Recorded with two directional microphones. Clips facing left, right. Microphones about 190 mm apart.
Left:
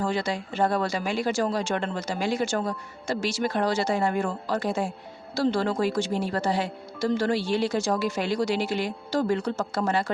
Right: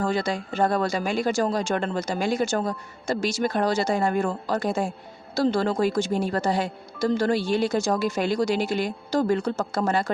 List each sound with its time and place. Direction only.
0.0 s speech: 45° right (ahead or behind)